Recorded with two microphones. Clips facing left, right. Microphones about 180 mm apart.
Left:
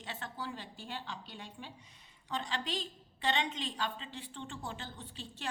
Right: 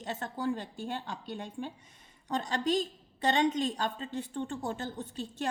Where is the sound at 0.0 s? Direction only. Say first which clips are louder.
Right 9 dB; 45° right (ahead or behind).